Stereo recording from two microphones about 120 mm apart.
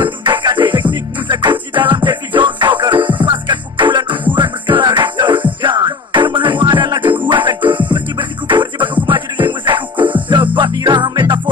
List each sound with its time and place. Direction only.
0.0 s music: 40° right (ahead or behind)